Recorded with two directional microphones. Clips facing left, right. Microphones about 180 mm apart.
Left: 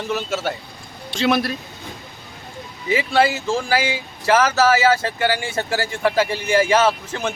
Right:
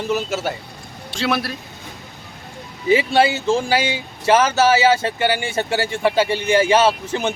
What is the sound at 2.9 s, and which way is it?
Speech, 25° right (ahead or behind).